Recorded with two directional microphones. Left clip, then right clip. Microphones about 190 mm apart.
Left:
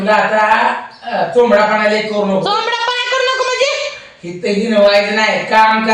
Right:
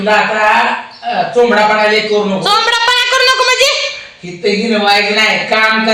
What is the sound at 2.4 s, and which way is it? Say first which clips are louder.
Child singing: right 5 dB; 10° right (ahead or behind).